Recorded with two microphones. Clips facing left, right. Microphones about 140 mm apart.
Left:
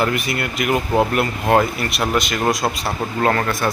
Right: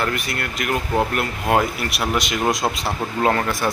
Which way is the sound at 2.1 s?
15° right (ahead or behind).